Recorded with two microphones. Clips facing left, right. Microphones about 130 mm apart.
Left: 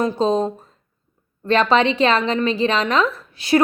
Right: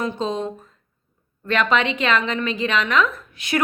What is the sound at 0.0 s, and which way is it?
A woman's voice, 35° left (ahead or behind).